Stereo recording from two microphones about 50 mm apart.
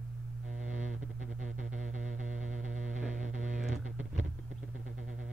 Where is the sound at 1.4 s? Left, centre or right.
Right.